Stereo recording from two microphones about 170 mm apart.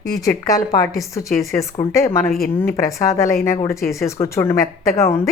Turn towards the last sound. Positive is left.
turn(degrees=15)  # may be behind; listen again after turning